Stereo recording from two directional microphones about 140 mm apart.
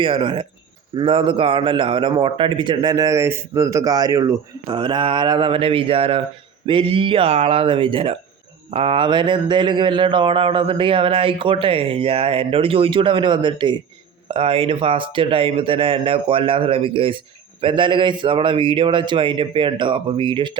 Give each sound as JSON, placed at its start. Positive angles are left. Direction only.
{"t": 0.0, "sound": "a man's voice", "side_deg": -35}